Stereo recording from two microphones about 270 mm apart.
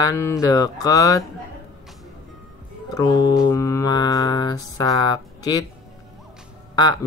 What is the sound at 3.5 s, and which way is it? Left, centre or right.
Mantra, centre.